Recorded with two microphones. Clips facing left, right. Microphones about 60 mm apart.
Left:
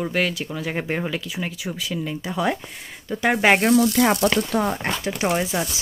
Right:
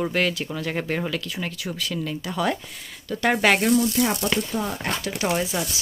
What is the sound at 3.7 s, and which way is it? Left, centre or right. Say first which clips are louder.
Speech: left 4 dB; left.